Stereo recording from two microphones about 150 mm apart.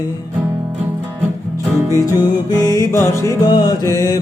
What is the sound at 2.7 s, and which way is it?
Music, 20° left (ahead or behind).